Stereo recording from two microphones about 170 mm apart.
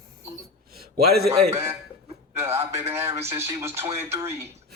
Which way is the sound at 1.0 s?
70° right (ahead or behind).